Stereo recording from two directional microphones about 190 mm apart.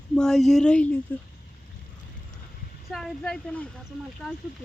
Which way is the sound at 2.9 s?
Centre (ahead or behind).